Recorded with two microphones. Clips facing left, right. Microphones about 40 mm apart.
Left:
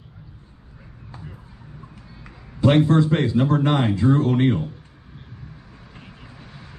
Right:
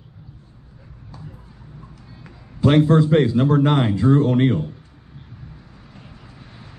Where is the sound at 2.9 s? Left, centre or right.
Centre.